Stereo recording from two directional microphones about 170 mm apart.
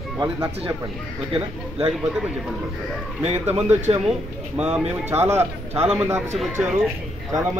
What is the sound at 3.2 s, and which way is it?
Speech, 40° right (ahead or behind).